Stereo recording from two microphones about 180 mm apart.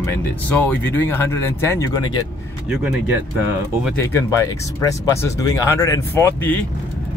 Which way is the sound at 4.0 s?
15° left (ahead or behind).